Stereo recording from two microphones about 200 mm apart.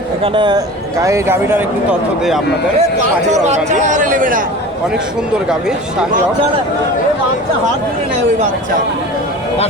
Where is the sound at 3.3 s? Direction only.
35° right (ahead or behind).